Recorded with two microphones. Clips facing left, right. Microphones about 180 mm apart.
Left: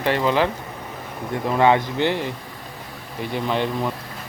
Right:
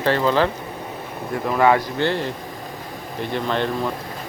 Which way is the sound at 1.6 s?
25° left (ahead or behind).